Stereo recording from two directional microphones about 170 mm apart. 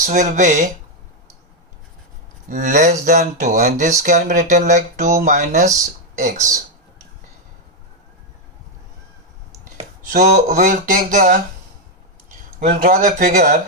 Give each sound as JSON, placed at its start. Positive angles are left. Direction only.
{"t": 0.0, "sound": "speech", "side_deg": -45}
{"t": 2.5, "sound": "speech", "side_deg": -50}
{"t": 10.1, "sound": "speech", "side_deg": -50}
{"t": 12.5, "sound": "speech", "side_deg": -50}